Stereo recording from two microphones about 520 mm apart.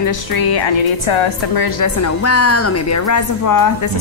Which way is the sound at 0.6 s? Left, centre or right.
Left.